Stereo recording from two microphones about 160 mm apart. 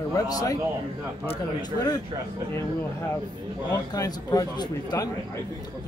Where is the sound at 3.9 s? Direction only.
20° left (ahead or behind).